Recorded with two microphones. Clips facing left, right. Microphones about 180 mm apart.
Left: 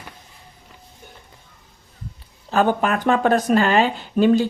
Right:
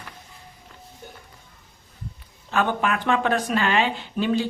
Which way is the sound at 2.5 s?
40° left (ahead or behind).